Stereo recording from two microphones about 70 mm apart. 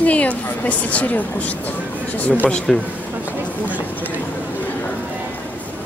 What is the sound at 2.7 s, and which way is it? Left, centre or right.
Speech, centre.